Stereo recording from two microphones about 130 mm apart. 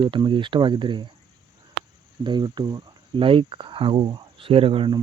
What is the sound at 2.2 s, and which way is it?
Speech, 35° right (ahead or behind).